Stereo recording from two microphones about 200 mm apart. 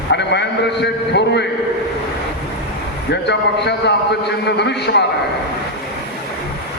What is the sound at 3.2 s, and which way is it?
A man's voice, 60° left (ahead or behind).